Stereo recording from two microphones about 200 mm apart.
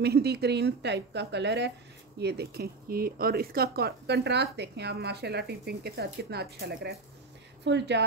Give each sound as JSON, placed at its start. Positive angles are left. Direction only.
{"t": 0.0, "sound": "a woman's voice", "side_deg": -55}